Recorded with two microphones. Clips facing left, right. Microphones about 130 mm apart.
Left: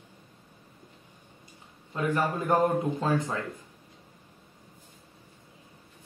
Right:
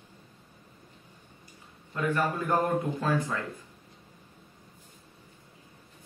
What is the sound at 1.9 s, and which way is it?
A man's voice, 25° left (ahead or behind).